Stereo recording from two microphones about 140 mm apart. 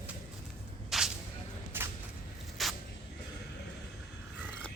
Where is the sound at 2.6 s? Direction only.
Centre (ahead or behind).